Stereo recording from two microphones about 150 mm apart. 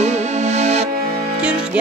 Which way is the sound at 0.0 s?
50° right (ahead or behind).